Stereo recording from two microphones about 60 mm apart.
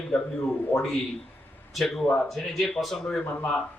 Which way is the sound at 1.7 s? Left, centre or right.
Centre.